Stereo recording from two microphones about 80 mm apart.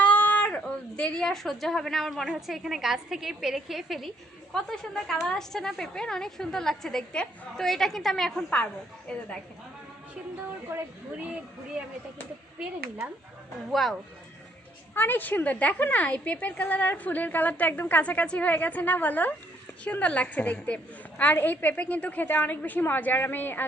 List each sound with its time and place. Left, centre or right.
0.0 s a sound: centre
2.3 s a woman's voice: centre
8.4 s a woman's voice: centre
10.7 s speech: right
14.9 s a woman's voice: left